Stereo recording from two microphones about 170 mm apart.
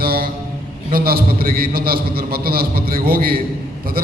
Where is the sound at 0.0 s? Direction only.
60° right (ahead or behind).